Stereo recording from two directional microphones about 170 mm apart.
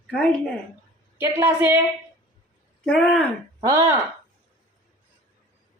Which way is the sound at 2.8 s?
5° left (ahead or behind).